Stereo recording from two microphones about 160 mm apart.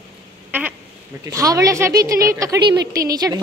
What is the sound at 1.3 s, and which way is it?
A woman's voice, 20° right (ahead or behind).